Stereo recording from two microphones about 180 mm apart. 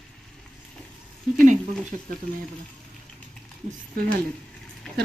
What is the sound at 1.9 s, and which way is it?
Speech, 45° right (ahead or behind).